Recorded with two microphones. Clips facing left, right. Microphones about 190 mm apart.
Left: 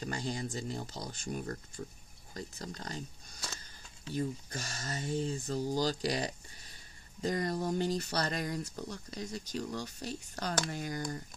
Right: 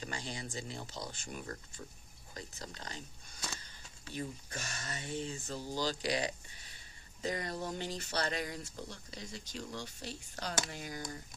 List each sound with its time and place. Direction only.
0.1 s speech: 45° left (ahead or behind)
4.1 s speech: 35° left (ahead or behind)